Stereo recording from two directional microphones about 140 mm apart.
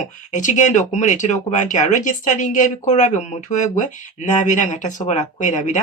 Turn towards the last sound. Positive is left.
turn(degrees=60)  # may be behind; listen again after turning